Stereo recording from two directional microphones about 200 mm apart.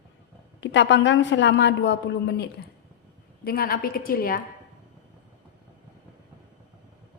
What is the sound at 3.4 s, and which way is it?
A woman's voice, 50° left (ahead or behind).